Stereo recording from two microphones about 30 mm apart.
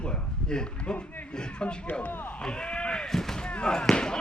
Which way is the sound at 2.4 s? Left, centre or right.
Left.